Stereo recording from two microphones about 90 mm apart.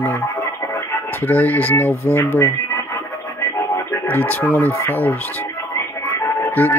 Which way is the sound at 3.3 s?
35° left (ahead or behind).